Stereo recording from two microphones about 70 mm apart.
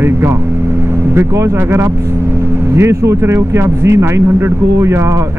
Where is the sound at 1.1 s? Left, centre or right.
Right.